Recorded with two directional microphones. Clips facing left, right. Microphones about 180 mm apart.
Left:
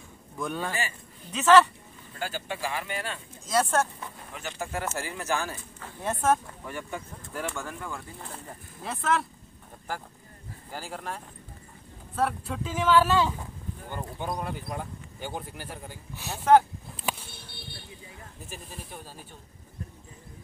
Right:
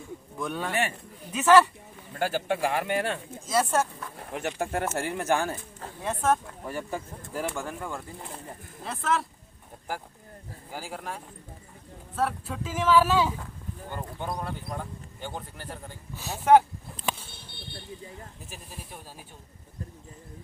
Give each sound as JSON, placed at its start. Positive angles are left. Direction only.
{"t": 0.4, "sound": "speech", "side_deg": 0}
{"t": 2.1, "sound": "speech", "side_deg": -60}
{"t": 3.4, "sound": "speech", "side_deg": -5}
{"t": 4.2, "sound": "speech", "side_deg": -60}
{"t": 6.0, "sound": "speech", "side_deg": 0}
{"t": 6.6, "sound": "speech", "side_deg": -35}
{"t": 8.8, "sound": "speech", "side_deg": 0}
{"t": 10.7, "sound": "speech", "side_deg": -10}
{"t": 13.8, "sound": "speech", "side_deg": 5}
{"t": 18.5, "sound": "speech", "side_deg": -5}